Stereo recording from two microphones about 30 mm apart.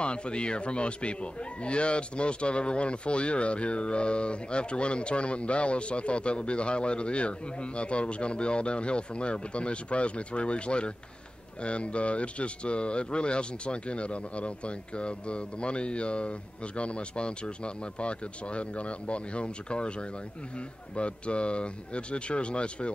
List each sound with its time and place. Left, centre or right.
0.0 s speech: left